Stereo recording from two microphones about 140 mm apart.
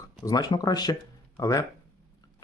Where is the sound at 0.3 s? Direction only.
30° left (ahead or behind).